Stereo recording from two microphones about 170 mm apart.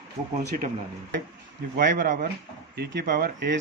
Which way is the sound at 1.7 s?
55° right (ahead or behind).